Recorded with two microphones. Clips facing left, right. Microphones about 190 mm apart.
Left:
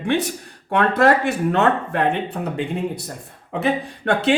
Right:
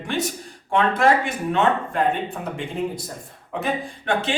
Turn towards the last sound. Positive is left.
turn(degrees=65)  # may be behind; listen again after turning